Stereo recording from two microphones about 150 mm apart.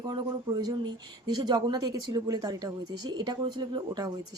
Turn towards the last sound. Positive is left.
turn(degrees=-30)  # may be behind; listen again after turning